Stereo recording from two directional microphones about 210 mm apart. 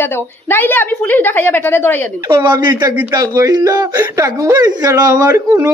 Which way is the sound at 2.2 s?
20° right (ahead or behind).